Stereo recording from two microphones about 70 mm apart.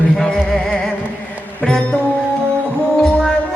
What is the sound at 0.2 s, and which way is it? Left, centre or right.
Music, centre.